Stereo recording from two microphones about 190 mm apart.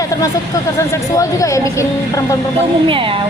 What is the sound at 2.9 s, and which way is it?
Speech, 25° right (ahead or behind).